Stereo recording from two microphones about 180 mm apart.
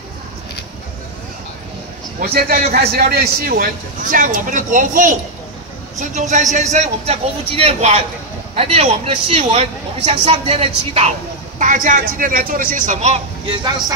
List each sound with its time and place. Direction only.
2.1 s a man's voice: 60° right (ahead or behind); by 11.1 s 35° right (ahead or behind)
11.5 s a man's voice: 45° right (ahead or behind)
13.5 s speech: 20° right (ahead or behind)